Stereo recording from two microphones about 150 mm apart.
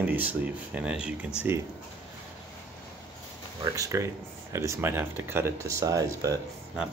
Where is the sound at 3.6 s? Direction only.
20° right (ahead or behind).